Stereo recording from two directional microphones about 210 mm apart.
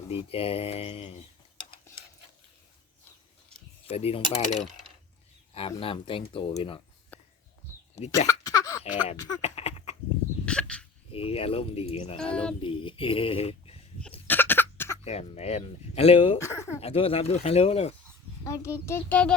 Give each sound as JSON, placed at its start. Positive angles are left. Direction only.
{"t": 0.1, "sound": "speech", "side_deg": 25}
{"t": 3.8, "sound": "speech", "side_deg": 30}
{"t": 7.1, "sound": "a sound", "side_deg": 5}
{"t": 8.0, "sound": "speech", "side_deg": 15}
{"t": 8.3, "sound": "cough", "side_deg": 15}
{"t": 8.8, "sound": "a sound", "side_deg": 30}
{"t": 10.4, "sound": "a sound", "side_deg": 5}
{"t": 11.1, "sound": "speech", "side_deg": 25}
{"t": 14.3, "sound": "cough", "side_deg": 10}
{"t": 15.0, "sound": "speech", "side_deg": 30}
{"t": 16.4, "sound": "speech", "side_deg": 15}
{"t": 16.8, "sound": "speech", "side_deg": 25}
{"t": 18.4, "sound": "speech", "side_deg": 15}